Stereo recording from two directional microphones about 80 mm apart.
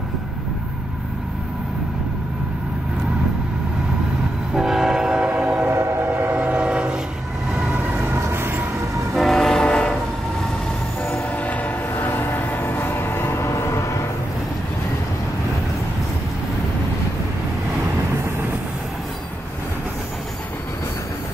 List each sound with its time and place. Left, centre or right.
4.6 s train: centre
5.7 s train: right
6.0 s train: centre
7.7 s vehicle: right
9.1 s train: centre
11.1 s train: centre; by 14.0 s left